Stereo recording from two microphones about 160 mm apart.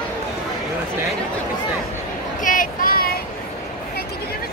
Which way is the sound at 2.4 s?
60° left (ahead or behind).